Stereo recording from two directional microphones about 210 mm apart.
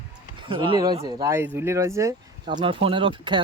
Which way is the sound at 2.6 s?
25° right (ahead or behind).